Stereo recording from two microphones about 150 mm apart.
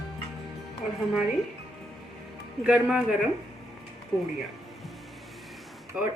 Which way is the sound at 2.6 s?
5° right (ahead or behind).